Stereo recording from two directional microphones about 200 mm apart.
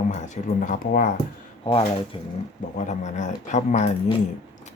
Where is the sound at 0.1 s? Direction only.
40° left (ahead or behind).